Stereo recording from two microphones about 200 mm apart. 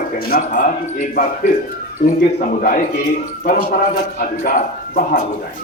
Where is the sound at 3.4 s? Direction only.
45° left (ahead or behind).